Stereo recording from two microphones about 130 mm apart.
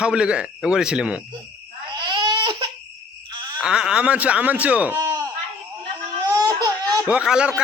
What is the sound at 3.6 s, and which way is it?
A man's voice, 5° right (ahead or behind).